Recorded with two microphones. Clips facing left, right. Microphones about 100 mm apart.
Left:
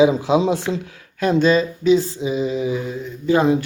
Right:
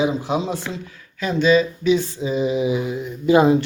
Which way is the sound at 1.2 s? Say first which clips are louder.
Left 1 dB; 45° left (ahead or behind).